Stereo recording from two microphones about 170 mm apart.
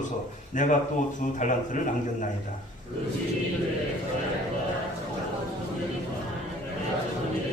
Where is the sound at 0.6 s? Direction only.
50° left (ahead or behind).